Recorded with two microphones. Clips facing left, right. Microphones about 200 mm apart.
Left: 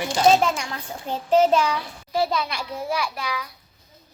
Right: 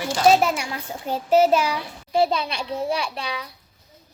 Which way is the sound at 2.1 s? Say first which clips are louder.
Right 3 dB; 25° right (ahead or behind).